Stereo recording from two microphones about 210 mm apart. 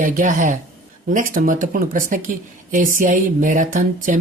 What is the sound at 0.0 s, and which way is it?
Speech, 40° right (ahead or behind).